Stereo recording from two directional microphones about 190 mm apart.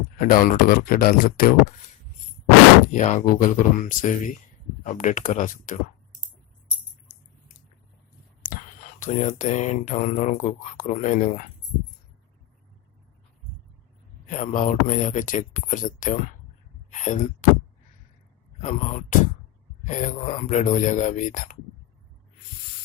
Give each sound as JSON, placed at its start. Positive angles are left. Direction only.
{"t": 0.2, "sound": "speech", "side_deg": 50}
{"t": 2.9, "sound": "speech", "side_deg": 40}
{"t": 9.0, "sound": "speech", "side_deg": 40}
{"t": 14.3, "sound": "speech", "side_deg": 40}
{"t": 18.6, "sound": "speech", "side_deg": 40}